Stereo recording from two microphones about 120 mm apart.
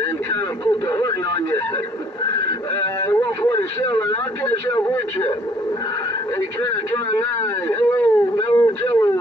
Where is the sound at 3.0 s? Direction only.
30° left (ahead or behind).